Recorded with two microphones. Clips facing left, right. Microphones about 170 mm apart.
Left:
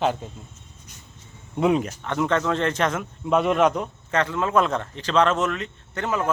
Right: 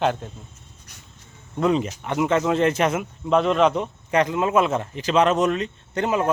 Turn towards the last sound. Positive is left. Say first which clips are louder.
# right 4 dB
turn(degrees=-15)  # may be behind; listen again after turning